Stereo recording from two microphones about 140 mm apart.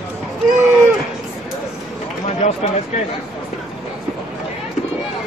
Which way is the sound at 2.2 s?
50° left (ahead or behind).